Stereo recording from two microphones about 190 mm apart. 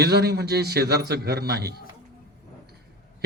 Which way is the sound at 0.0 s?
55° right (ahead or behind).